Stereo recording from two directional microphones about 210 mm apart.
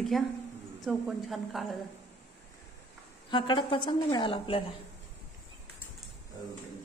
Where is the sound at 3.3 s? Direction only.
20° left (ahead or behind).